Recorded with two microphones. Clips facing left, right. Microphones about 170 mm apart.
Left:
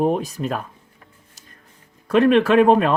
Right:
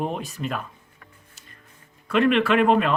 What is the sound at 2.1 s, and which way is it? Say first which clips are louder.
Speech: left 5 dB; 40° left (ahead or behind).